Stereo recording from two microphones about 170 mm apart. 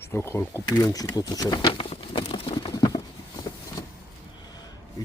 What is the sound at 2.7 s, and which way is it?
Patter, 20° left (ahead or behind).